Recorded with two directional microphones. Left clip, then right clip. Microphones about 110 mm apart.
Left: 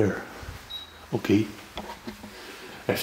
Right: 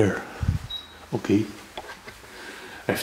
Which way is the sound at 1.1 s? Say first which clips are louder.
Even; 5° left (ahead or behind).